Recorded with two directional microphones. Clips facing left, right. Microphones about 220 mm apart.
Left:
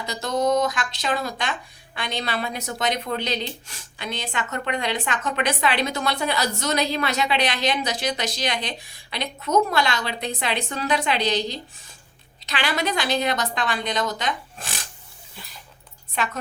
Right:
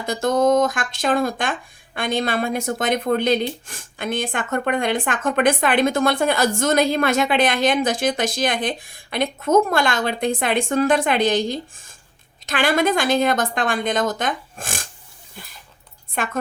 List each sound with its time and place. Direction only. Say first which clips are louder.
0.0 s speech: right 5 dB; 50° right (ahead or behind)
16.1 s speech: right 3 dB; 50° right (ahead or behind)